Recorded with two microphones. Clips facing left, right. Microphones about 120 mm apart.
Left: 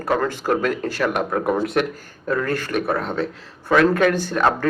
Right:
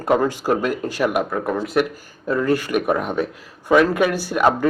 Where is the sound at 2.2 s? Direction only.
15° right (ahead or behind).